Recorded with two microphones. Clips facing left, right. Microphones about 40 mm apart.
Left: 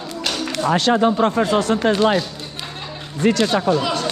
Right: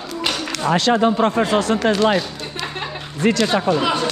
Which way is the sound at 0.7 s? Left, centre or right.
Right.